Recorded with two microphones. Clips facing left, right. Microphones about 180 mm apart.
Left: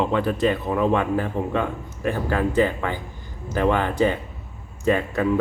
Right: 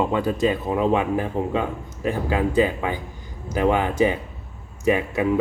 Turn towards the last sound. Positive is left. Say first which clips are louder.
# even
turn(degrees=-15)  # may be behind; listen again after turning